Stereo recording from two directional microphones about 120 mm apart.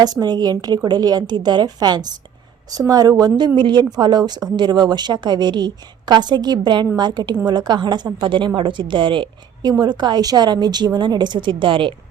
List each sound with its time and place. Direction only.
0.0 s a woman's voice: 35° right (ahead or behind)